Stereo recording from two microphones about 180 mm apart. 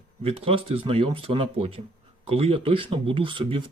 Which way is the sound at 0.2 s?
35° right (ahead or behind).